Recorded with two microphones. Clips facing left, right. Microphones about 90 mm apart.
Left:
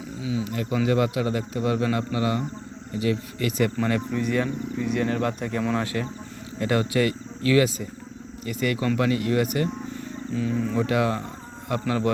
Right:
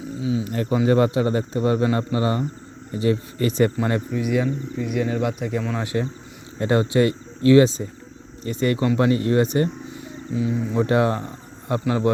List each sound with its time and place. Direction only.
0.2 s a man's voice: 30° right (ahead or behind)
4.1 s speech: 10° right (ahead or behind)
5.8 s a man's voice: 20° right (ahead or behind)
9.9 s a sound: 15° right (ahead or behind)
10.8 s a man's voice: 30° right (ahead or behind)